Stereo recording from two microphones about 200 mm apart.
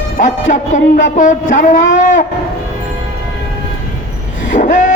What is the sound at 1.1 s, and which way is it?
A man's voice, 40° left (ahead or behind).